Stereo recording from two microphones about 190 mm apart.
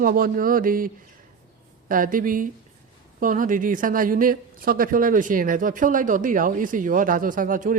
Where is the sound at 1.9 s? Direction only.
45° right (ahead or behind).